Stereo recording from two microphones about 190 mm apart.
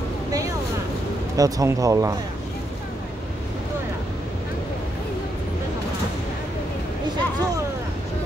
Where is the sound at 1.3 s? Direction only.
20° right (ahead or behind).